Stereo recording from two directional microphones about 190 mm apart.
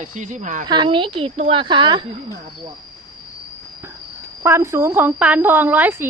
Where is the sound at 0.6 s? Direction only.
25° right (ahead or behind).